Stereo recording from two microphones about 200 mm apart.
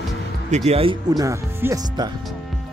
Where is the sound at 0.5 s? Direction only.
30° right (ahead or behind).